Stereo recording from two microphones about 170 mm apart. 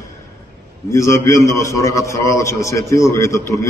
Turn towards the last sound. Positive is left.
turn(degrees=15)  # may be behind; listen again after turning